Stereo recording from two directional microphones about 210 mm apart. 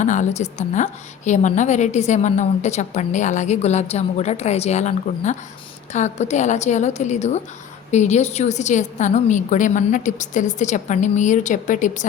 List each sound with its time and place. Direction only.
0.0 s a woman's voice: 35° left (ahead or behind)